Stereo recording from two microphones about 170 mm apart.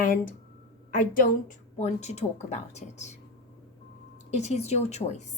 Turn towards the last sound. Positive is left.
turn(degrees=40)  # may be behind; listen again after turning